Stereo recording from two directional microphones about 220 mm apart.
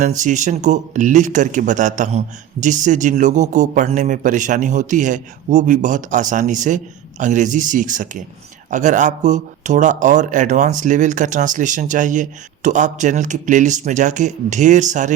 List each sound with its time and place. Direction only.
0.0 s speech: 35° right (ahead or behind)